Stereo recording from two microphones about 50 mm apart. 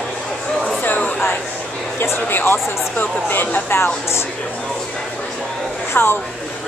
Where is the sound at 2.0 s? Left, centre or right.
Left.